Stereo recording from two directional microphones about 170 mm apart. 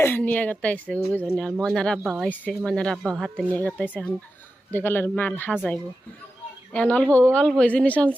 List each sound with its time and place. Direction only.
0.0 s a woman's voice: 10° left (ahead or behind)